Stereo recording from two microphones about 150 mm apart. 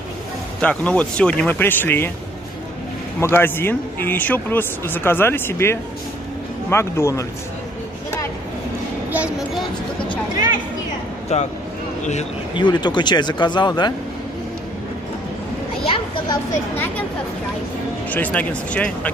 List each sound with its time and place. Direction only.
0.6 s speech: 10° left (ahead or behind)
3.2 s speech: 15° left (ahead or behind)
9.1 s a sound: 10° right (ahead or behind)
11.3 s speech: 50° left (ahead or behind)
12.5 s speech: 30° left (ahead or behind)
15.8 s children playing: 35° left (ahead or behind)
16.7 s speech: 10° left (ahead or behind)
18.1 s speech: 10° left (ahead or behind)